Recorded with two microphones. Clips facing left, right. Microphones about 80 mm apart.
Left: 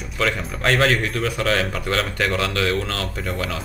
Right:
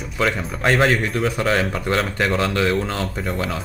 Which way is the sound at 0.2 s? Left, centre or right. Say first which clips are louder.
Right 2 dB; centre.